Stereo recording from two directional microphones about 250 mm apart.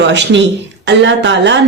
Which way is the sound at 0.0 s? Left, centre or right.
Right.